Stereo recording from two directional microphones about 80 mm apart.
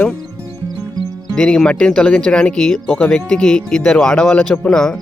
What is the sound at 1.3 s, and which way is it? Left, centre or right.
Speech, centre.